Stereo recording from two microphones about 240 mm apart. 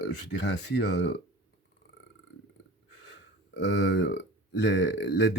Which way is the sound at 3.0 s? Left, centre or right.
Left.